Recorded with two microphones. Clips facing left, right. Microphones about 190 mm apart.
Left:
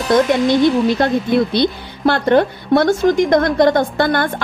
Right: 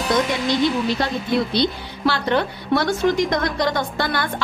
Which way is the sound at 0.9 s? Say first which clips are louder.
Left 6 dB; 55° left (ahead or behind).